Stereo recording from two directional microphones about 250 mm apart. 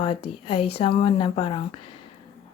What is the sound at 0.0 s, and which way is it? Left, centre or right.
A woman's voice, left.